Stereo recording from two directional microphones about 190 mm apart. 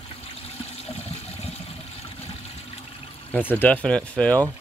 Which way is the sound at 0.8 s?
35° left (ahead or behind).